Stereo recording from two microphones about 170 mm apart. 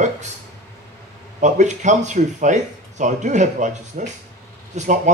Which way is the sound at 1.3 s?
45° right (ahead or behind).